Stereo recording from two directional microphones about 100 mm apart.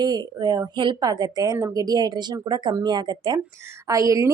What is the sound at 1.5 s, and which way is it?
Speech, 30° right (ahead or behind).